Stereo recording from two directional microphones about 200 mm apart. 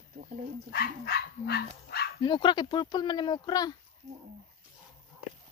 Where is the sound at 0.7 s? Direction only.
50° left (ahead or behind).